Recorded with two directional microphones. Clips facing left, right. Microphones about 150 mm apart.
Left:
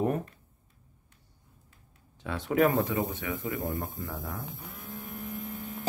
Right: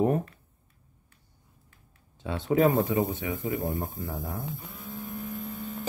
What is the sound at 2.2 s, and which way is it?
Speech, 25° right (ahead or behind).